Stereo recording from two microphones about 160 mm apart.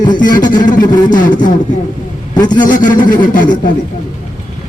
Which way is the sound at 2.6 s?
55° left (ahead or behind).